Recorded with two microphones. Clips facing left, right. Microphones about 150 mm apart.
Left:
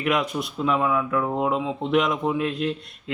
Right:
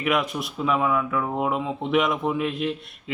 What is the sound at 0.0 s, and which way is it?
Mantra, centre (ahead or behind).